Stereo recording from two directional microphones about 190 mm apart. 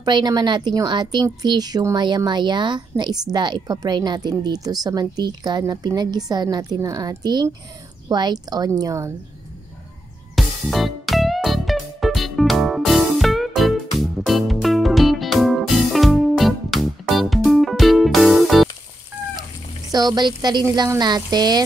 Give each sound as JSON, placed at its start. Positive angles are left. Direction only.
{"t": 0.0, "sound": "speech", "side_deg": -20}
{"t": 10.3, "sound": "music", "side_deg": 0}
{"t": 19.9, "sound": "speech", "side_deg": -20}